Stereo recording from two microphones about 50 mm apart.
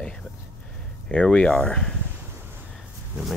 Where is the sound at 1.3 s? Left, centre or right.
Centre.